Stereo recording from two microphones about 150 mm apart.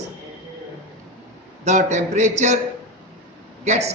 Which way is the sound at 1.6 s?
50° right (ahead or behind).